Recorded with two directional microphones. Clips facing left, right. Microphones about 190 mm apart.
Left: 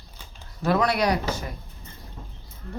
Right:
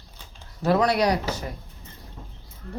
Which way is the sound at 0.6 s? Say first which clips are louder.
Right 2 dB; 35° right (ahead or behind).